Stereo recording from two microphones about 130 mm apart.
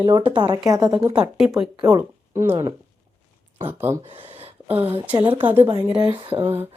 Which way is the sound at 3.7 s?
15° right (ahead or behind).